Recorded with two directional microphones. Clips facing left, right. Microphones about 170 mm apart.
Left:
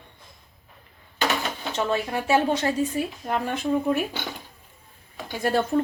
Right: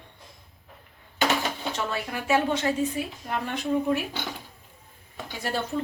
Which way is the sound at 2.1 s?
35° left (ahead or behind).